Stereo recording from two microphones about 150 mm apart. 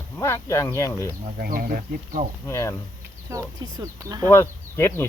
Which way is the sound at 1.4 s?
75° right (ahead or behind).